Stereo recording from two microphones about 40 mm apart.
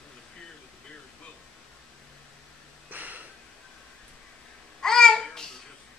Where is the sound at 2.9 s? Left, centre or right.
Right.